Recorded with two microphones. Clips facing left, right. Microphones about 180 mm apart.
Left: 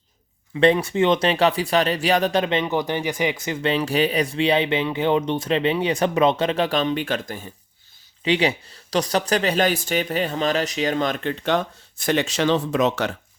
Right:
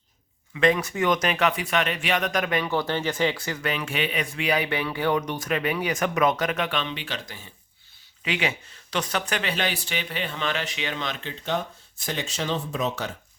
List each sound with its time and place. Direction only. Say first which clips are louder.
0.5 s speech: left 5 dB; 30° left (ahead or behind); by 7.5 s 50° left (ahead or behind)
8.2 s speech: left 7 dB; 30° left (ahead or behind); by 13.1 s 75° left (ahead or behind)